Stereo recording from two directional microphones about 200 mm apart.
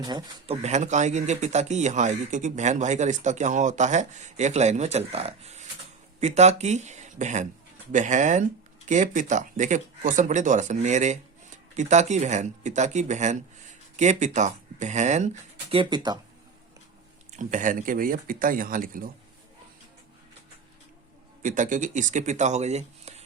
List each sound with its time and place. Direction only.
0.0 s speech: 25° right (ahead or behind)
17.3 s speech: 40° right (ahead or behind)
21.4 s speech: 40° right (ahead or behind)